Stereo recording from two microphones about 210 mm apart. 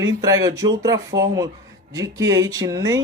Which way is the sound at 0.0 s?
15° right (ahead or behind).